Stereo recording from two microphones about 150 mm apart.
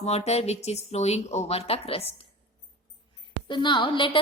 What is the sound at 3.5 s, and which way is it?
Speech, 30° left (ahead or behind).